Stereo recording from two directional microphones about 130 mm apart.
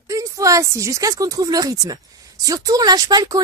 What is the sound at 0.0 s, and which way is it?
Speech, 25° right (ahead or behind).